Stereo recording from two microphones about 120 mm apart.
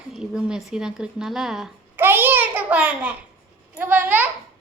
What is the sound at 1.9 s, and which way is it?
A child's voice, 15° right (ahead or behind).